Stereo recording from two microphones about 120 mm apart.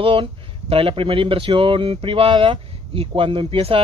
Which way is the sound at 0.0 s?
45° right (ahead or behind).